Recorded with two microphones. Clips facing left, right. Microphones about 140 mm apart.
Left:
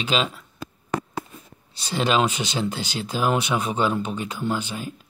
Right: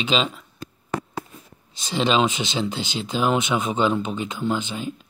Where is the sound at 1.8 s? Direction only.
5° left (ahead or behind).